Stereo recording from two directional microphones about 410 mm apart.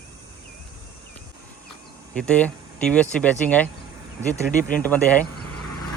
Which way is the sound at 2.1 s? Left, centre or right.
Centre.